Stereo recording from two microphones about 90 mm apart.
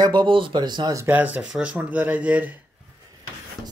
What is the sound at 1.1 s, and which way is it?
Speech, 20° right (ahead or behind).